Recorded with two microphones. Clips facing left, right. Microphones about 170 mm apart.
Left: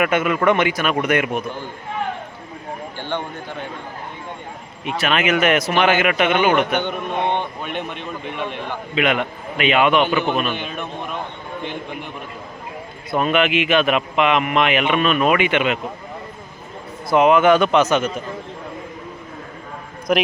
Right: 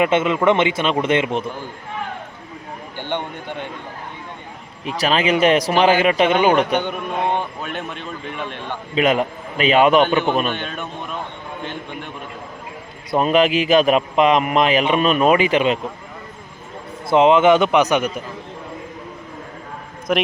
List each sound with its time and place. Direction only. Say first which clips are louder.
0.0 s a man's voice: right 1 dB; 25° right (ahead or behind)
3.0 s speech: right 2 dB; 20° right (ahead or behind)
4.9 s a man's voice: right 1 dB; 35° right (ahead or behind)
6.8 s a man's voice: even; 5° right (ahead or behind)
9.0 s a man's voice: right 3 dB; 35° right (ahead or behind)
10.5 s a man's voice: even; centre (ahead or behind)
13.1 s a man's voice: right 3 dB; 35° right (ahead or behind)
17.1 s a man's voice: right 1 dB; 25° right (ahead or behind)
20.1 s a man's voice: left 1 dB; centre (ahead or behind)